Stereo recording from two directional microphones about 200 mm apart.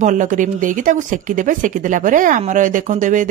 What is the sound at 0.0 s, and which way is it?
Speech, 40° right (ahead or behind).